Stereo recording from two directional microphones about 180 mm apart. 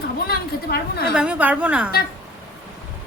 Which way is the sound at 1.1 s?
5° right (ahead or behind).